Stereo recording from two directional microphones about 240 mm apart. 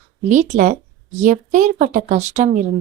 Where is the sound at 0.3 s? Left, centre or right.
Right.